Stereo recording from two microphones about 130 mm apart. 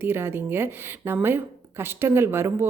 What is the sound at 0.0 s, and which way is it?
Speech, 15° right (ahead or behind).